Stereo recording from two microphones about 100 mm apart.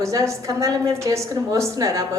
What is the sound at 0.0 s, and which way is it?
A woman's voice, 35° right (ahead or behind).